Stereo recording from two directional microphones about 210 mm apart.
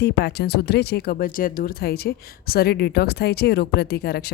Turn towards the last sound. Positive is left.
turn(degrees=50)  # may be behind; listen again after turning